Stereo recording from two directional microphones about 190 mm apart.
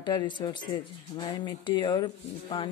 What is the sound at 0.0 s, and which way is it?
Speech, 20° left (ahead or behind).